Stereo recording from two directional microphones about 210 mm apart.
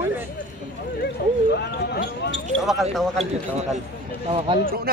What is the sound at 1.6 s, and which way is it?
Speech, 50° left (ahead or behind).